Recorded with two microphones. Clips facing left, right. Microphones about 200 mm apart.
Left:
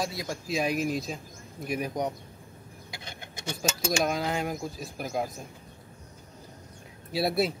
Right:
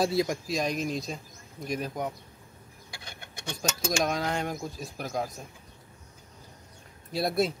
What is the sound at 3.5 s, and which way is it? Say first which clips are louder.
Speech: left 1 dB; 5° left (ahead or behind).